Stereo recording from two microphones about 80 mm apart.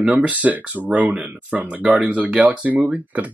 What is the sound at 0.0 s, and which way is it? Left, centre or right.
Speech, centre.